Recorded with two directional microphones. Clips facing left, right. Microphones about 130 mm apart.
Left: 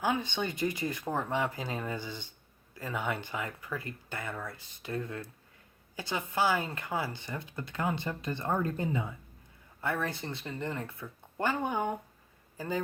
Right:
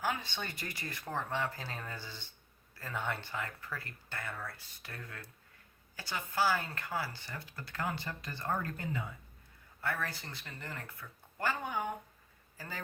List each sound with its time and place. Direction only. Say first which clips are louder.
0.0 s a man's voice: left 6 dB; 20° left (ahead or behind)